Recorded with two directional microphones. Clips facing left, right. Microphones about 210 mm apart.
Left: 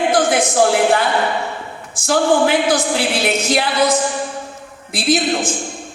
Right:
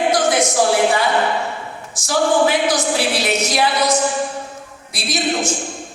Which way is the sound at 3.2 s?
55° left (ahead or behind).